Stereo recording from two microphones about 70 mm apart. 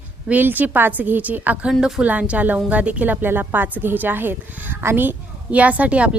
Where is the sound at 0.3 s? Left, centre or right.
Right.